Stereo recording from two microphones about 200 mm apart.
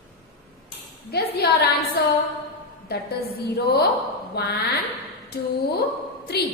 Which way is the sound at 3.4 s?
55° left (ahead or behind).